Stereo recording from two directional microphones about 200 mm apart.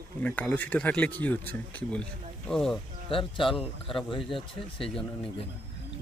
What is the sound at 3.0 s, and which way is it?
Speech, 25° left (ahead or behind).